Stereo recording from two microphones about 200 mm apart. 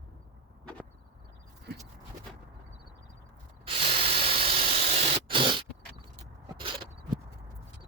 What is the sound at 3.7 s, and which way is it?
Spray, 30° right (ahead or behind).